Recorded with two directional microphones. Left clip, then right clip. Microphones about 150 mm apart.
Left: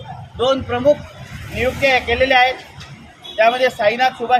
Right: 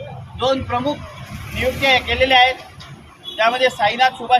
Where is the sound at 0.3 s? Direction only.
20° left (ahead or behind).